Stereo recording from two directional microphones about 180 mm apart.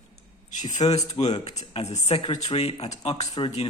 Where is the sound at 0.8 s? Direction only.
30° left (ahead or behind).